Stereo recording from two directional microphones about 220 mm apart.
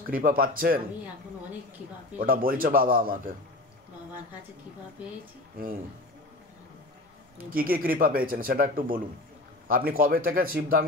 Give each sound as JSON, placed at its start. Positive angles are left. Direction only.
{"t": 0.1, "sound": "speech", "side_deg": -40}
{"t": 2.1, "sound": "speech", "side_deg": -40}
{"t": 5.6, "sound": "speech", "side_deg": -40}
{"t": 7.3, "sound": "speech", "side_deg": -40}